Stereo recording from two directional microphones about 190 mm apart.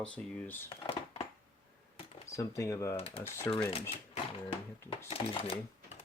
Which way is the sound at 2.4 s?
15° left (ahead or behind).